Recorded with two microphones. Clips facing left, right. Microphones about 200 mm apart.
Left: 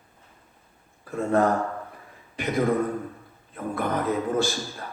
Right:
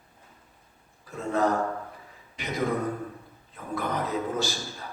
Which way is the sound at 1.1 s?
55° left (ahead or behind).